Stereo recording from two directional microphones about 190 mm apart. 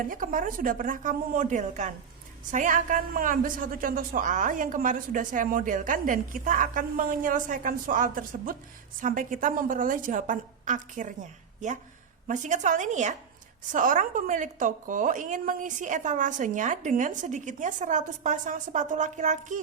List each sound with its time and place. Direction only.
0.1 s a woman's voice: 45° right (ahead or behind)